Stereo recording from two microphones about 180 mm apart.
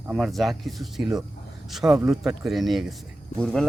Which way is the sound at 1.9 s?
15° right (ahead or behind).